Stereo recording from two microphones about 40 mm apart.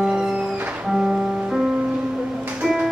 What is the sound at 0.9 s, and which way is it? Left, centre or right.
Music, centre.